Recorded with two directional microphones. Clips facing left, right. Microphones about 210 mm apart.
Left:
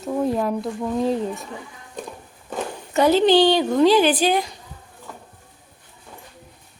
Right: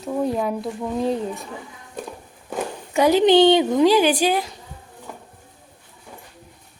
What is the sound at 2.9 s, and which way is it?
A woman's voice, 10° right (ahead or behind).